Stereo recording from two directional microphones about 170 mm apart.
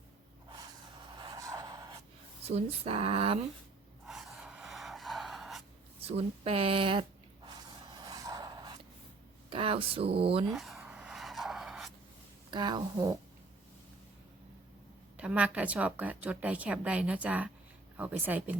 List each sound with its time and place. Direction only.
0.5 s a sound: 25° right (ahead or behind)
2.5 s speech: 35° right (ahead or behind)
4.0 s gasp: centre (ahead or behind)
6.0 s speech: 35° right (ahead or behind)
7.4 s snort: 25° right (ahead or behind)
9.5 s speech: 30° right (ahead or behind)
10.5 s a sound: centre (ahead or behind)
12.5 s a woman's voice: 25° right (ahead or behind)
15.2 s a woman's voice: 5° right (ahead or behind)